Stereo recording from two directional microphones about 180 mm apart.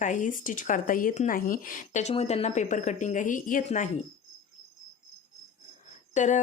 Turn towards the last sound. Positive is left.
turn(degrees=40)  # may be behind; listen again after turning